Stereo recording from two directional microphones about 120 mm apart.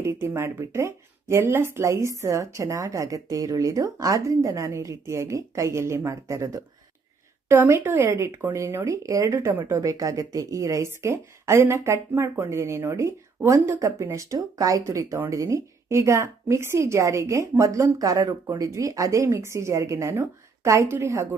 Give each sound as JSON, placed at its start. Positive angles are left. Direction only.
{"t": 0.0, "sound": "a woman's voice", "side_deg": -20}
{"t": 9.8, "sound": "a woman's voice", "side_deg": -30}